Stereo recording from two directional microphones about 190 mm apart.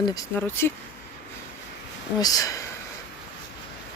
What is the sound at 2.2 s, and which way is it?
Speech, 20° left (ahead or behind).